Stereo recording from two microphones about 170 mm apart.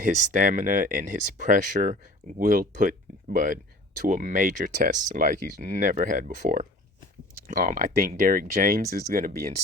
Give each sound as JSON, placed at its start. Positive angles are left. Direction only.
{"t": 0.0, "sound": "speech", "side_deg": -50}